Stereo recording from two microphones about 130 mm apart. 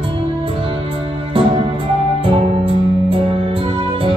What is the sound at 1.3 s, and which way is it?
Music, 40° right (ahead or behind).